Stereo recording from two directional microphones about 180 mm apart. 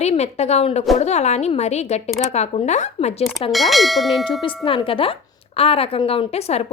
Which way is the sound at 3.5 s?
Centre (ahead or behind).